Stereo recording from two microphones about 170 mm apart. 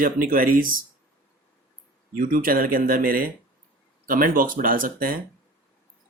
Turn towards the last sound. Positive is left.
turn(degrees=-55)  # may be behind; listen again after turning